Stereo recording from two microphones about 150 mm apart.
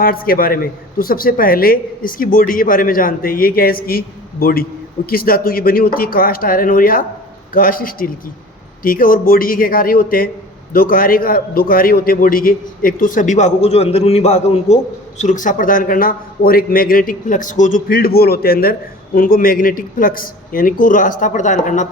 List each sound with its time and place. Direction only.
0.0 s a man's voice: 75° left (ahead or behind); by 14.8 s 45° left (ahead or behind)
15.2 s a man's voice: 60° left (ahead or behind)